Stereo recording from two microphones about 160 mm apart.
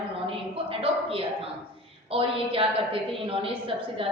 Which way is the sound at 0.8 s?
35° right (ahead or behind).